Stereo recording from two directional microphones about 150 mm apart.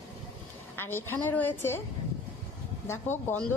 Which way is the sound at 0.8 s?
15° left (ahead or behind).